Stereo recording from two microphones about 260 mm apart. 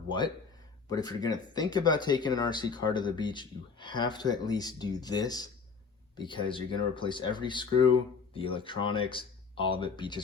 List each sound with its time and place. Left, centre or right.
0.9 s speech: centre